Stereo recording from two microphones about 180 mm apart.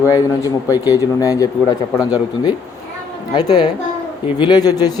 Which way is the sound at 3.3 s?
25° left (ahead or behind).